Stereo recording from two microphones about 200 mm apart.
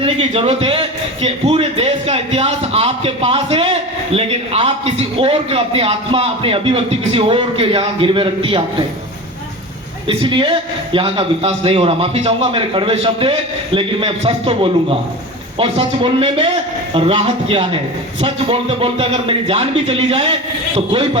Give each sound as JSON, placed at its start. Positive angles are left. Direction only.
{"t": 0.0, "sound": "a man's voice", "side_deg": -30}
{"t": 10.1, "sound": "a man's voice", "side_deg": -25}